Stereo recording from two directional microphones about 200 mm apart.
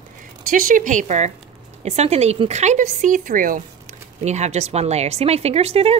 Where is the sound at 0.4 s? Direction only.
45° right (ahead or behind).